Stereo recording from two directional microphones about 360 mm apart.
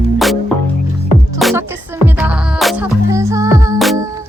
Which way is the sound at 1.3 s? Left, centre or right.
Centre.